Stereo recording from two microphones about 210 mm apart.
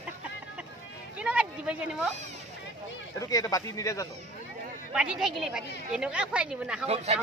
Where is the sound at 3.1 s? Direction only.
15° left (ahead or behind).